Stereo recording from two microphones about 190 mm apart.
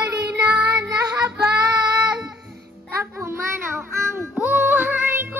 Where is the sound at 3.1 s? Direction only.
10° right (ahead or behind).